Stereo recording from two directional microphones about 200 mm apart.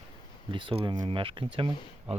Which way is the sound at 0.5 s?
25° right (ahead or behind).